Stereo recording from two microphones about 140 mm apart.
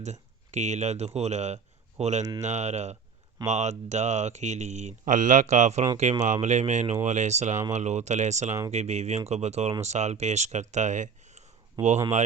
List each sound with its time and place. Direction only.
0.0 s speech: 55° right (ahead or behind)